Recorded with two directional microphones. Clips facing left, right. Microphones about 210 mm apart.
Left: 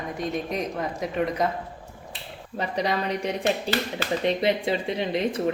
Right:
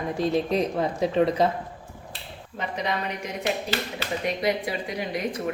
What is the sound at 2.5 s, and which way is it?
A woman's voice, 35° left (ahead or behind).